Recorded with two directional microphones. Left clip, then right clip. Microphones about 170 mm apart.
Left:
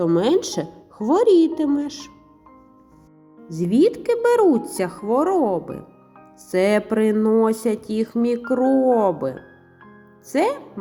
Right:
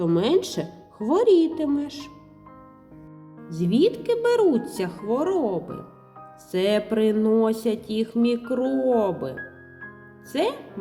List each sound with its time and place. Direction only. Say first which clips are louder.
0.0 s speech: left 3 dB; 20° left (ahead or behind)
3.8 s speech: left 4 dB; 20° left (ahead or behind)
10.3 s speech: left 5 dB; 20° left (ahead or behind)